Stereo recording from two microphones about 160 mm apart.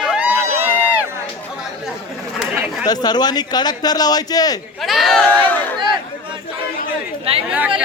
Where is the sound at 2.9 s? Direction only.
25° left (ahead or behind).